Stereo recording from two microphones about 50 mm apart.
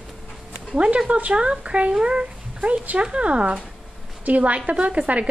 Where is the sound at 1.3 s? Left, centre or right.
Centre.